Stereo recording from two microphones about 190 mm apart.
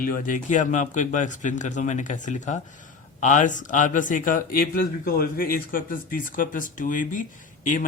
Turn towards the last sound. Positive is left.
turn(degrees=45)  # may be behind; listen again after turning